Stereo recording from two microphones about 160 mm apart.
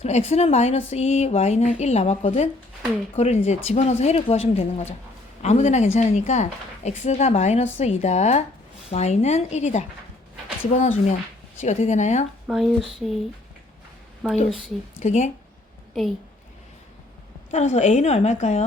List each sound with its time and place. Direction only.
0.0 s a woman's voice: 45° left (ahead or behind)
12.5 s speech: centre (ahead or behind)
14.2 s speech: centre (ahead or behind)
14.9 s a woman's voice: 45° left (ahead or behind)
17.5 s a woman's voice: 45° left (ahead or behind)